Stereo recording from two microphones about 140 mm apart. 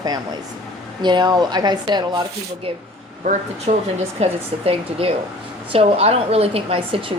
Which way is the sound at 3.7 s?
60° right (ahead or behind).